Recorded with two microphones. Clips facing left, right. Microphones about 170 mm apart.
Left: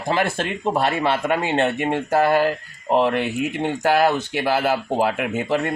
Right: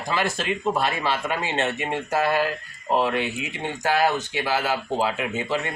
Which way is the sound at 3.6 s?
60° left (ahead or behind).